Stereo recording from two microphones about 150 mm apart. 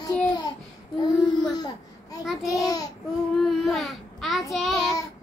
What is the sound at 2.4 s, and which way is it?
Laughter, 25° left (ahead or behind).